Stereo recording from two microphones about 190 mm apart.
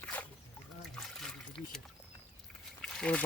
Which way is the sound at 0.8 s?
Centre (ahead or behind).